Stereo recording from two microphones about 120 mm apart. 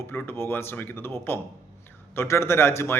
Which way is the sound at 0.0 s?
20° left (ahead or behind).